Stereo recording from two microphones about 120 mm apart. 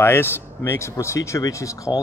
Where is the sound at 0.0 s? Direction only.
20° left (ahead or behind).